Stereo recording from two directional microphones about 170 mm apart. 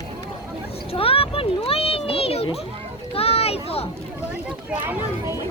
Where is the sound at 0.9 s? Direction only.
35° left (ahead or behind).